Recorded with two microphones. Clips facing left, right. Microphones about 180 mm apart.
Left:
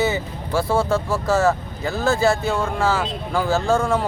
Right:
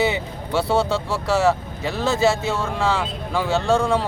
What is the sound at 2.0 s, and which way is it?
Speech, centre (ahead or behind).